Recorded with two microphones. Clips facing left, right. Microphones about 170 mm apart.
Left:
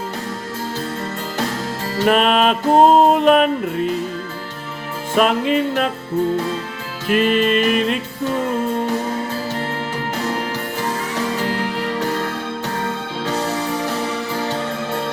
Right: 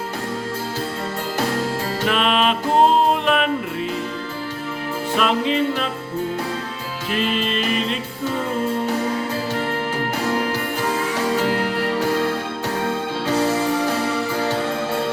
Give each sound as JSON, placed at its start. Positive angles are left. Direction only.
{"t": 2.0, "sound": "music", "side_deg": 45}
{"t": 5.1, "sound": "music", "side_deg": 50}
{"t": 7.1, "sound": "music", "side_deg": 55}